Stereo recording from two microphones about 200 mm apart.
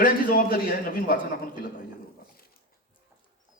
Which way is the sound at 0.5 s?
45° left (ahead or behind).